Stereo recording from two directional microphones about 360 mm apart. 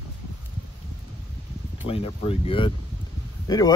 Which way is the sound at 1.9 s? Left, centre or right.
Centre.